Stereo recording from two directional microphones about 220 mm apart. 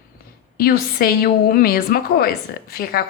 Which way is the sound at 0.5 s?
45° left (ahead or behind).